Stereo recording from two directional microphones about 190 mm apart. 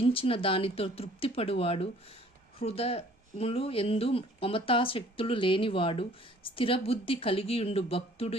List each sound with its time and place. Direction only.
0.0 s speech: 30° left (ahead or behind)